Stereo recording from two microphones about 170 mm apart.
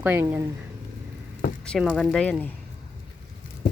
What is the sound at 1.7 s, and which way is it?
Speech, centre (ahead or behind).